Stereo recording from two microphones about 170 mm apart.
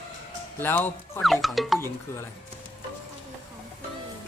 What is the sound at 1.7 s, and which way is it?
Speech, 15° left (ahead or behind).